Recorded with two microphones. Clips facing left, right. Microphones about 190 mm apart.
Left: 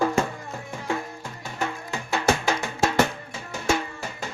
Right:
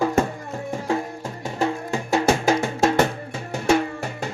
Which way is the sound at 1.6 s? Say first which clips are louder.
Right 7 dB; 25° right (ahead or behind).